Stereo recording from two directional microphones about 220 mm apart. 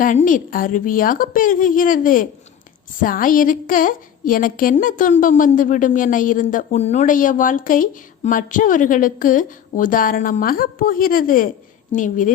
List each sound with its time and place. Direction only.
0.0 s a woman's voice: 35° left (ahead or behind)